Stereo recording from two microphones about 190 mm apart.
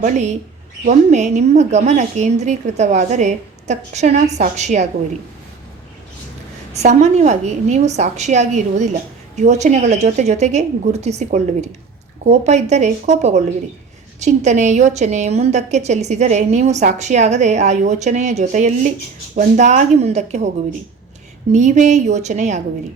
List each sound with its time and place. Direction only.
0.0 s a woman's voice: 40° right (ahead or behind)
6.7 s a woman's voice: 35° right (ahead or behind)